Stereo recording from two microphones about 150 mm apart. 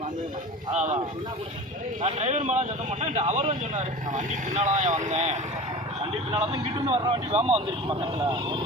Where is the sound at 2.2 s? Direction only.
55° right (ahead or behind).